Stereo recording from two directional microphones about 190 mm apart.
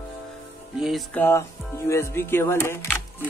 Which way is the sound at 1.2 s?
15° left (ahead or behind).